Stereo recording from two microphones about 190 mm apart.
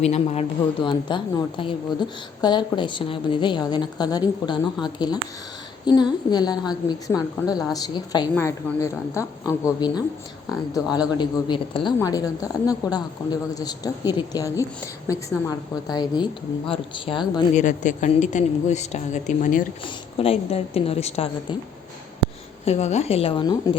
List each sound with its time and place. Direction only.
0.0 s a woman's voice: 35° left (ahead or behind); by 10.0 s 20° left (ahead or behind)
11.2 s a woman's voice: 25° left (ahead or behind)
17.5 s a woman's voice: 40° left (ahead or behind)
19.8 s a woman's voice: 30° left (ahead or behind)
22.6 s a woman's voice: 35° left (ahead or behind)